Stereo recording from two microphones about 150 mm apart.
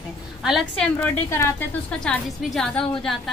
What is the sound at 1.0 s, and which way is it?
Speech, 15° left (ahead or behind).